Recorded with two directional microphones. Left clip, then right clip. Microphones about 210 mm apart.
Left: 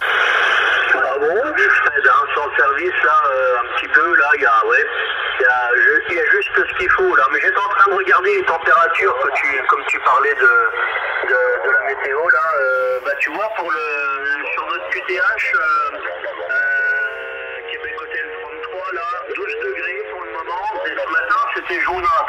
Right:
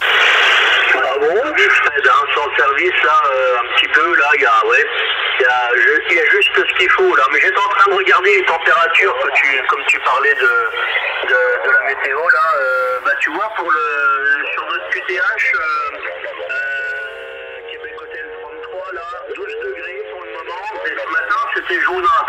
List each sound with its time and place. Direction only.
0.2 s speech: 30° right (ahead or behind); by 12.9 s 20° left (ahead or behind)
13.1 s speech: 40° left (ahead or behind)
16.5 s a sound: 15° left (ahead or behind)
20.8 s radio: 30° left (ahead or behind)